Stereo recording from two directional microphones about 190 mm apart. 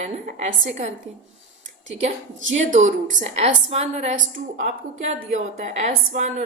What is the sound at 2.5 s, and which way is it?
A woman's voice, 40° right (ahead or behind).